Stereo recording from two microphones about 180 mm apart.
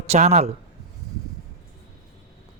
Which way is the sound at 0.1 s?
40° right (ahead or behind).